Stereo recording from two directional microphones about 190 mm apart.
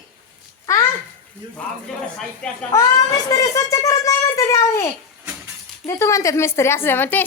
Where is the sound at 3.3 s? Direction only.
15° left (ahead or behind).